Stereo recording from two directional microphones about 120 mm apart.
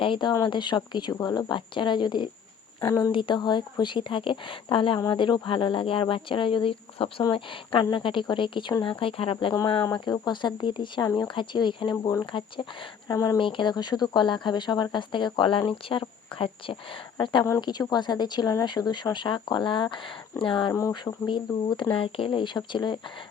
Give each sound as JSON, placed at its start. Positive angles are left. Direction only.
{"t": 0.0, "sound": "speech", "side_deg": 40}
{"t": 9.8, "sound": "speech", "side_deg": 35}
{"t": 13.1, "sound": "speech", "side_deg": 30}
{"t": 13.4, "sound": "speech", "side_deg": 45}